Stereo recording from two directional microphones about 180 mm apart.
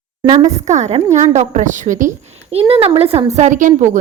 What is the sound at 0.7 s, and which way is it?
A woman's voice, 40° right (ahead or behind).